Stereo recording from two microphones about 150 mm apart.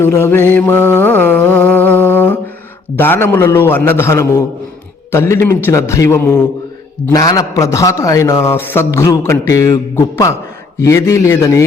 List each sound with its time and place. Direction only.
0.0 s mantra: 15° left (ahead or behind)
3.0 s a man's voice: 15° left (ahead or behind)